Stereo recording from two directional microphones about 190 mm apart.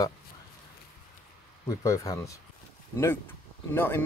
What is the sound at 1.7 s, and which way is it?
Speech, 15° left (ahead or behind).